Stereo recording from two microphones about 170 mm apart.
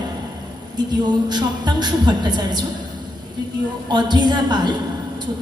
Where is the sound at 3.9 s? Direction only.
25° right (ahead or behind).